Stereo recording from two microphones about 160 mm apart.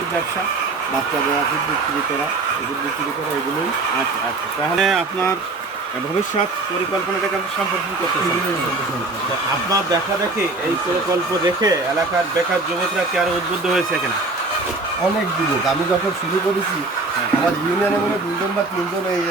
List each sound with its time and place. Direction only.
4.8 s speech: centre (ahead or behind)
11.4 s speech: 20° right (ahead or behind)